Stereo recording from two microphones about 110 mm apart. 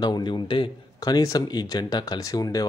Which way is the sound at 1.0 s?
35° left (ahead or behind).